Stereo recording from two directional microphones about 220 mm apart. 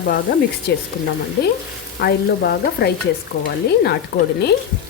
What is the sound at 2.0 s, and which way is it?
Speech, 45° left (ahead or behind).